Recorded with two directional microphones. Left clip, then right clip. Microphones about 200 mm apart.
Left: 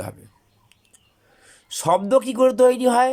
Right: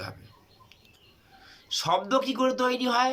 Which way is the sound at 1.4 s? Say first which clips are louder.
Right 2 dB; 35° left (ahead or behind).